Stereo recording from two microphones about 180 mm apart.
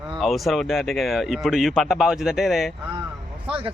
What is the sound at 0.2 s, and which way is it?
Speech, centre (ahead or behind).